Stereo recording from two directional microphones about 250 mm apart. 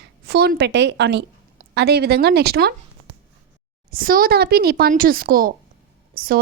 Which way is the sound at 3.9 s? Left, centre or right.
Right.